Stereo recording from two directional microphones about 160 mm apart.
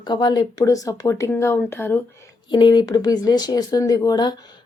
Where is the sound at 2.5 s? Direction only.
30° left (ahead or behind).